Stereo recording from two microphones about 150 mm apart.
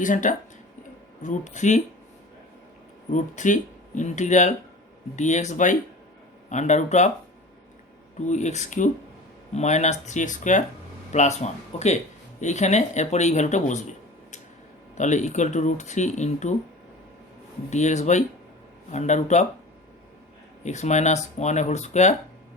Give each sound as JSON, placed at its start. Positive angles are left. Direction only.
{"t": 0.0, "sound": "speech", "side_deg": 60}
{"t": 3.1, "sound": "speech", "side_deg": 55}
{"t": 8.3, "sound": "speech", "side_deg": 50}
{"t": 14.9, "sound": "speech", "side_deg": 55}
{"t": 17.7, "sound": "speech", "side_deg": 50}
{"t": 20.7, "sound": "speech", "side_deg": 50}